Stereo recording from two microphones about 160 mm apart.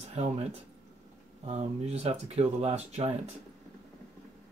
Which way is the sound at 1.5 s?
40° right (ahead or behind).